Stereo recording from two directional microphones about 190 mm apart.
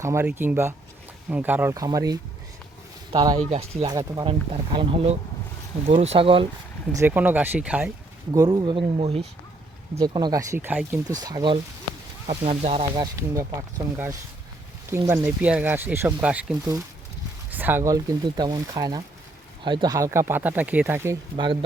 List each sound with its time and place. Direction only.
0.0 s speech: 15° right (ahead or behind)
3.5 s speech: 35° right (ahead or behind)
3.8 s speech: 20° right (ahead or behind)
6.9 s speech: 10° right (ahead or behind)
8.3 s speech: 20° right (ahead or behind)
10.0 s speech: 20° right (ahead or behind)
12.3 s speech: 35° right (ahead or behind)
13.1 s speech: 15° right (ahead or behind)
21.3 s speech: 25° right (ahead or behind)